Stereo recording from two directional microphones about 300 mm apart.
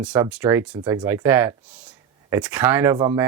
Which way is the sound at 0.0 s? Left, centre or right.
Centre.